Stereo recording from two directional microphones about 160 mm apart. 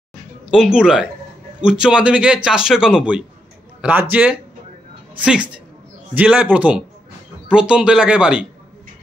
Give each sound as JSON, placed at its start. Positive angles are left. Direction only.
{"t": 0.5, "sound": "speech", "side_deg": -5}